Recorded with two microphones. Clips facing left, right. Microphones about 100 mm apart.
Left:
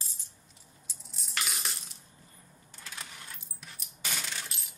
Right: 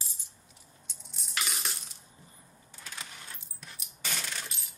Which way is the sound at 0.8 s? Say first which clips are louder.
Left 1 dB; centre (ahead or behind).